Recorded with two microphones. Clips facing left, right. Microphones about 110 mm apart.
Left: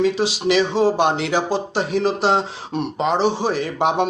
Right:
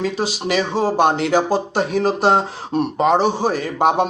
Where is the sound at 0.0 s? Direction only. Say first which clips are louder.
Left 3 dB; 45° right (ahead or behind).